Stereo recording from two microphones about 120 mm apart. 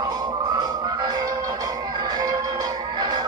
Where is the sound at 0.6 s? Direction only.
35° right (ahead or behind).